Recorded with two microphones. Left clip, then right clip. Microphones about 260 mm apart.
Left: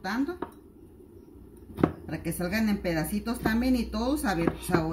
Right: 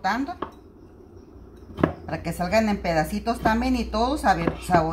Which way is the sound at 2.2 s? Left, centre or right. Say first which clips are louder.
Right 9 dB; centre.